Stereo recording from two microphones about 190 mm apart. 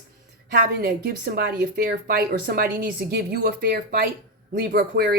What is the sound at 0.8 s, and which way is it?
A woman's voice, 55° right (ahead or behind).